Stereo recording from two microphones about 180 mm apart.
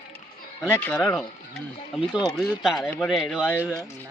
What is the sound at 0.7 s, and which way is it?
Speech, 10° left (ahead or behind).